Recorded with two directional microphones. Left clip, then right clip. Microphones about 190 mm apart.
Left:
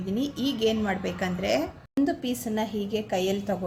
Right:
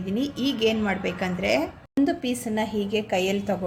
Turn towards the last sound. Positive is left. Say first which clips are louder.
# right 3 dB
turn(degrees=0)  # may be behind; listen again after turning